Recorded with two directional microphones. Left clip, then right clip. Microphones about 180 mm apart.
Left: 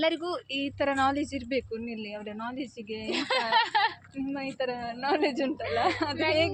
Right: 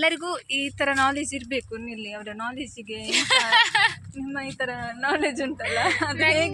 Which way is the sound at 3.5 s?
25° left (ahead or behind).